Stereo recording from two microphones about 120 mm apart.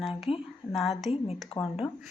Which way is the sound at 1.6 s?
40° left (ahead or behind).